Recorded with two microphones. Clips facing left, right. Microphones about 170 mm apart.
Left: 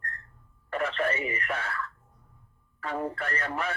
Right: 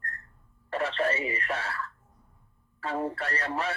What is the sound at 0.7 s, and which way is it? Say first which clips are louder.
Speech: right 1 dB; 30° right (ahead or behind).